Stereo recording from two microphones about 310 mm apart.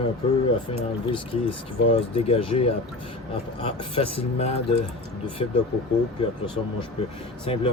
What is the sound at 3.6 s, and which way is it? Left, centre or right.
Speech, centre.